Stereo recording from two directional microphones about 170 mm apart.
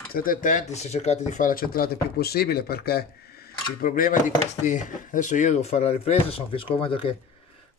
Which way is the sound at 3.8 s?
55° left (ahead or behind).